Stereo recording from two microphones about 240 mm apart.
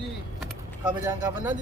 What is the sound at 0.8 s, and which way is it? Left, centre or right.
Speech, centre.